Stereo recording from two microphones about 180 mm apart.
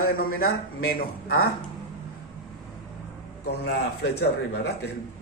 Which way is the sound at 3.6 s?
65° left (ahead or behind).